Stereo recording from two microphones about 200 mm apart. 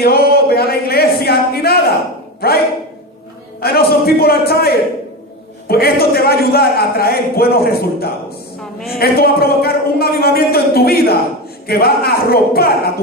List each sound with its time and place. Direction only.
0.0 s a sound: 50° left (ahead or behind)
2.4 s a man's voice: 50° left (ahead or behind)
3.6 s a man's voice: 50° left (ahead or behind)